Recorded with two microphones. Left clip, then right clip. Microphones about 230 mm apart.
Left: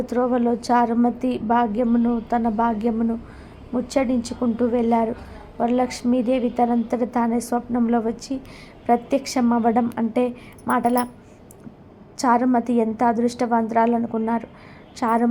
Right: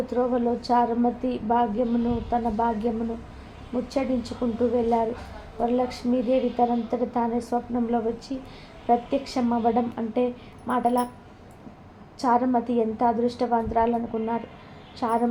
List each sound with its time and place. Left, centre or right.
0.0 s a woman's voice: left
12.1 s a woman's voice: left